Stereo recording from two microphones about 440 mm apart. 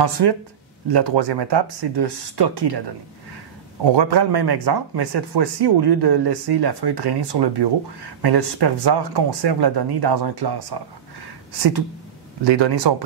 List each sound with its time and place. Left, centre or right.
0.0 s speech: right
3.9 s speech: right
12.4 s speech: right